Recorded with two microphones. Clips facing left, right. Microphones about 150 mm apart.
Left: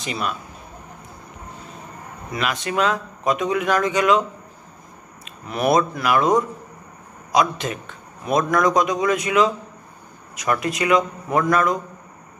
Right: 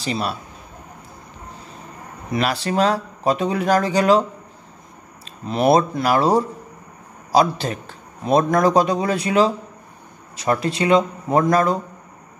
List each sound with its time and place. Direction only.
0.0 s a man's voice: 35° right (ahead or behind)
2.3 s a man's voice: 35° right (ahead or behind)
5.5 s a man's voice: 30° right (ahead or behind)